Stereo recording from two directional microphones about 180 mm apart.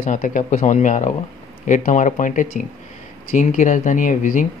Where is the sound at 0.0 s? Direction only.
50° left (ahead or behind).